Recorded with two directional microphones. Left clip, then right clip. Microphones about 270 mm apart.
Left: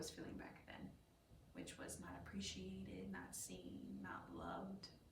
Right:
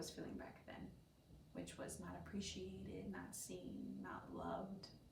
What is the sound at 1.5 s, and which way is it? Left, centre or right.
A woman's voice, centre.